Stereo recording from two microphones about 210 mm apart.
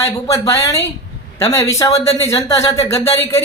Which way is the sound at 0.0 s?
15° left (ahead or behind).